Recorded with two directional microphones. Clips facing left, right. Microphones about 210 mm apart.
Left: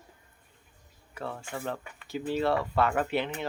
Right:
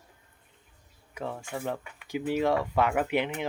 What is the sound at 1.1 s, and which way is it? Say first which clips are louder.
Speech: right 2 dB; 15° right (ahead or behind).